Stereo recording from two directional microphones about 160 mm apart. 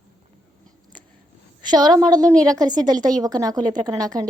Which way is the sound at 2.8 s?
25° right (ahead or behind).